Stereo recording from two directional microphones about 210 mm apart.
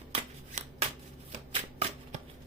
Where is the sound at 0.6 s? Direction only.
35° right (ahead or behind).